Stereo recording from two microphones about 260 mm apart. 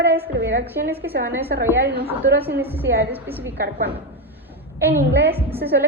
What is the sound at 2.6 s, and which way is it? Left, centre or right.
Speech, centre.